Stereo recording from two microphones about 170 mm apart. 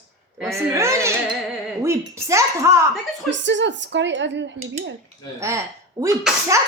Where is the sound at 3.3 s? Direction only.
90° right.